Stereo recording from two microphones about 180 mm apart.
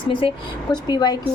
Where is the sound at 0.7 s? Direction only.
25° left (ahead or behind).